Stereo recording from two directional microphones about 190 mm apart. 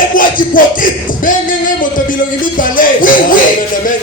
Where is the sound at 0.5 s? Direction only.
45° left (ahead or behind).